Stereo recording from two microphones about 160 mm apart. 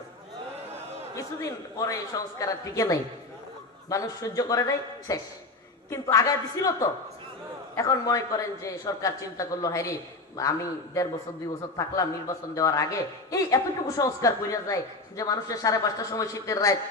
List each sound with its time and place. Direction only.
1.1 s a man's voice: 20° left (ahead or behind)